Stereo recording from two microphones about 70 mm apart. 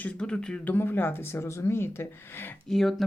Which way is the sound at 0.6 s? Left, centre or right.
Left.